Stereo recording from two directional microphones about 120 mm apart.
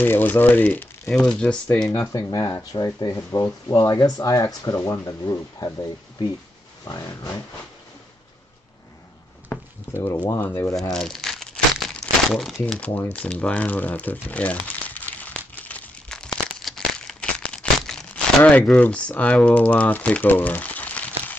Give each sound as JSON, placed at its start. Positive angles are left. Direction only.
{"t": 0.0, "sound": "speech", "side_deg": 15}
{"t": 1.9, "sound": "speech", "side_deg": 30}
{"t": 6.8, "sound": "speech", "side_deg": 30}
{"t": 9.5, "sound": "a sound", "side_deg": 10}
{"t": 10.3, "sound": "speech", "side_deg": 20}
{"t": 10.7, "sound": "crumpling", "side_deg": 5}
{"t": 12.7, "sound": "a sound", "side_deg": 15}